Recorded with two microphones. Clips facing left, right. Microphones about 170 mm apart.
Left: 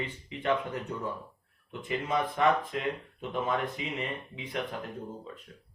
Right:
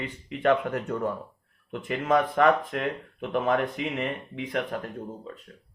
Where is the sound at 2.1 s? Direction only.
60° right (ahead or behind).